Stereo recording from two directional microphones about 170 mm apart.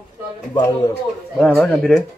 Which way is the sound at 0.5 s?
20° left (ahead or behind).